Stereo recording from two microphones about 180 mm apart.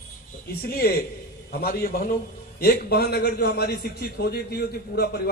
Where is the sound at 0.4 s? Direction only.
55° left (ahead or behind).